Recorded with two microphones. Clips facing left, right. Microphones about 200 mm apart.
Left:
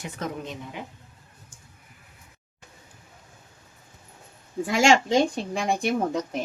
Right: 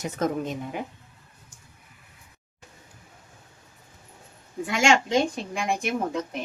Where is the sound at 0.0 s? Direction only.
45° right (ahead or behind).